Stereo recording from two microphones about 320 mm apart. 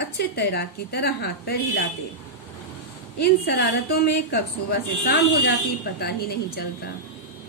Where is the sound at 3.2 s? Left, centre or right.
Left.